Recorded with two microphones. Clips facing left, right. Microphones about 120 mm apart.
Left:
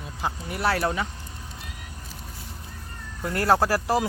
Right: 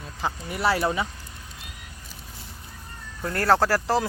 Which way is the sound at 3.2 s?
15° left (ahead or behind).